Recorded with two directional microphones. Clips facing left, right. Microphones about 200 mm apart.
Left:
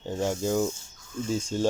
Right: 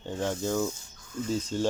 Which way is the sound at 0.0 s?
10° left (ahead or behind).